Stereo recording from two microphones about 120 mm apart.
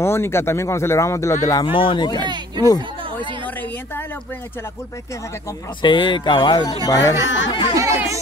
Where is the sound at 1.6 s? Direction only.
45° left (ahead or behind).